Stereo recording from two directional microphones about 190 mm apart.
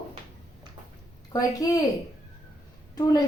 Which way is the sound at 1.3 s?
20° left (ahead or behind).